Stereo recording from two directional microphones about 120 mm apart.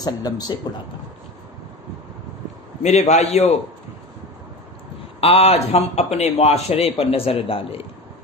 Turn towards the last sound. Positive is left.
turn(degrees=50)  # may be behind; listen again after turning